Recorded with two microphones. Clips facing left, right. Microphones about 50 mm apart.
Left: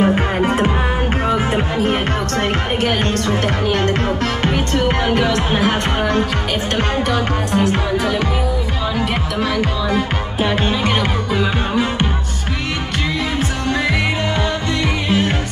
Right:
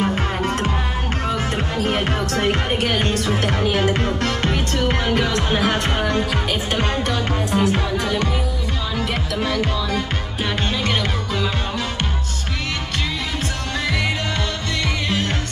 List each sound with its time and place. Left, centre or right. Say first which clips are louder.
0.0 s music: left 6 dB; centre
1.8 s music: left 3 dB; centre
15.0 s music: left 7 dB; centre